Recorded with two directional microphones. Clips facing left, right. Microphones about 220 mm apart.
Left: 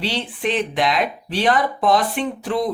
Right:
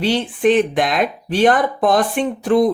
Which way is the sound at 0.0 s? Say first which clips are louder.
Right 8 dB; 50° right (ahead or behind).